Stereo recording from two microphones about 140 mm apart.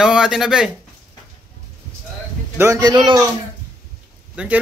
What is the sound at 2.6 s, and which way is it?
Speech, 25° right (ahead or behind).